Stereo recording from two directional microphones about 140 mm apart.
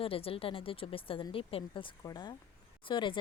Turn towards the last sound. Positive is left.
turn(degrees=35)  # may be behind; listen again after turning